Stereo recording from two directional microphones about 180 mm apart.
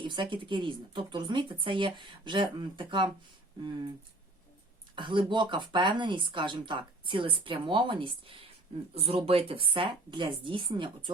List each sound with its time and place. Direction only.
0.0 s speech: 25° right (ahead or behind)
4.9 s speech: 25° right (ahead or behind)